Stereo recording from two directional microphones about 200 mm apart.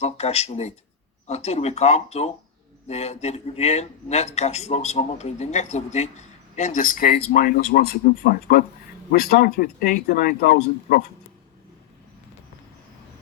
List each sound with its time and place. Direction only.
0.0 s a man's voice: 30° left (ahead or behind); by 11.0 s 50° left (ahead or behind)